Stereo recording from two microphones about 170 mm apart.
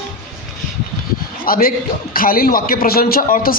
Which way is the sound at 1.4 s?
60° left (ahead or behind).